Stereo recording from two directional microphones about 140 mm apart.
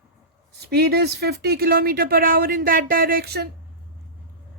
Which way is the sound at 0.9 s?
90° right.